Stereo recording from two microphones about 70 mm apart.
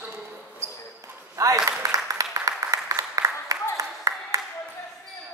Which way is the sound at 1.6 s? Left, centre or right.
Right.